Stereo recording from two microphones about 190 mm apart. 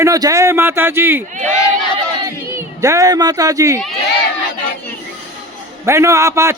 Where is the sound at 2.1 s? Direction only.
15° right (ahead or behind).